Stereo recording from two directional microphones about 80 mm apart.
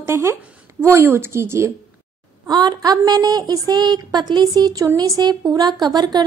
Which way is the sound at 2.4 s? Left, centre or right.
Right.